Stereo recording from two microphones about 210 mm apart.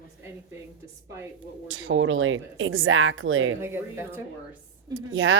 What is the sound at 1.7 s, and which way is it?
A woman's voice, 75° right (ahead or behind).